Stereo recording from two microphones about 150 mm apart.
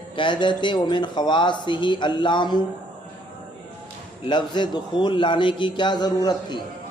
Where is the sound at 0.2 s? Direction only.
30° left (ahead or behind).